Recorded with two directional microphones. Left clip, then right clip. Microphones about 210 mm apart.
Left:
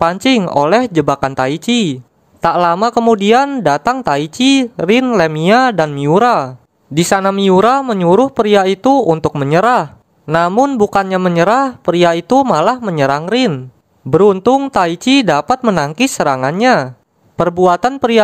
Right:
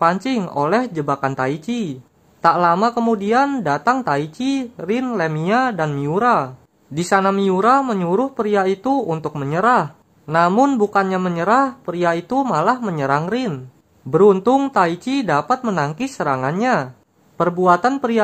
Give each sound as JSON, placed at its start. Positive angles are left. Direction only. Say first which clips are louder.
{"t": 0.0, "sound": "speech", "louder": "left 5 dB", "side_deg": 40}